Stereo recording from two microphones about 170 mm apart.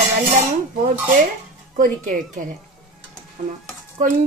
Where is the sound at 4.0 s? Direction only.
55° right (ahead or behind).